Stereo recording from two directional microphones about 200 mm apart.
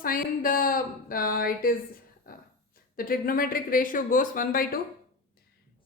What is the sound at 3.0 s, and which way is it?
A woman's voice, 45° left (ahead or behind).